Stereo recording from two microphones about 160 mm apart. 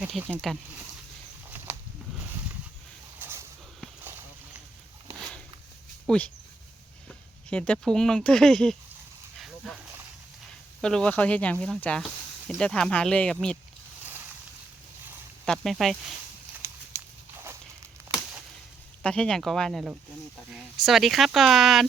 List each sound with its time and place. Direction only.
0.0 s speech: 10° right (ahead or behind)
1.5 s a sound: 10° right (ahead or behind)
3.2 s a sound: 15° right (ahead or behind)
6.1 s speech: 10° left (ahead or behind)
7.5 s speech: 10° left (ahead or behind)
9.6 s snake: centre (ahead or behind)
10.8 s speech: 5° left (ahead or behind)
15.5 s speech: centre (ahead or behind)
19.0 s speech: 5° left (ahead or behind)